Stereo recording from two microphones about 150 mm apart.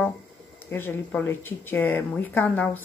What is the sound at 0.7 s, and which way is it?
Dishes, 15° left (ahead or behind).